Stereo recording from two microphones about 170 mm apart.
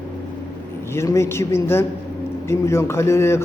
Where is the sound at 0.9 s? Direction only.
15° left (ahead or behind).